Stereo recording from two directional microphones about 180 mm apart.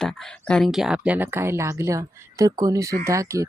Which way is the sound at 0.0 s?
5° left (ahead or behind).